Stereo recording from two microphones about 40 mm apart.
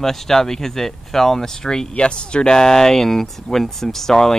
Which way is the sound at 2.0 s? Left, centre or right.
Left.